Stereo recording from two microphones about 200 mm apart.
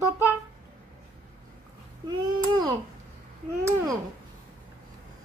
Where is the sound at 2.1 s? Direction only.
20° right (ahead or behind).